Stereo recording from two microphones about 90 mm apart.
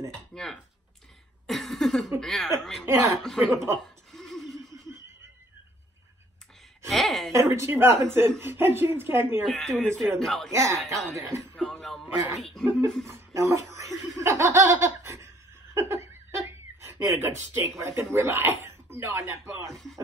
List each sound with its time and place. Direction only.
0.1 s speech: 5° left (ahead or behind)
1.5 s a sound: centre (ahead or behind)
3.2 s speech: centre (ahead or behind)
3.8 s a sound: 5° left (ahead or behind)
6.9 s speech: 5° left (ahead or behind)
7.3 s a woman's voice: 35° right (ahead or behind)
9.4 s speech: centre (ahead or behind)
10.5 s speech: 35° right (ahead or behind)
11.5 s music: 5° left (ahead or behind)
12.4 s speech: 5° left (ahead or behind)
13.1 s speech: 35° right (ahead or behind)
14.1 s laughter: 30° right (ahead or behind)
19.7 s speech: 5° left (ahead or behind)